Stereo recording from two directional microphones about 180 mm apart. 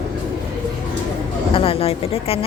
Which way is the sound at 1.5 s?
30° left (ahead or behind).